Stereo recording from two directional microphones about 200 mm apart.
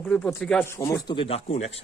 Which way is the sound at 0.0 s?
5° left (ahead or behind).